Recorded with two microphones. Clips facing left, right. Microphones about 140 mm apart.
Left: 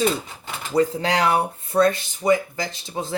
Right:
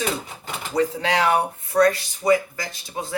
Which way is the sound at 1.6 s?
25° left (ahead or behind).